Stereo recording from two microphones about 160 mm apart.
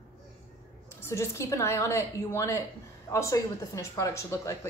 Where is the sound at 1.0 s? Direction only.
15° left (ahead or behind).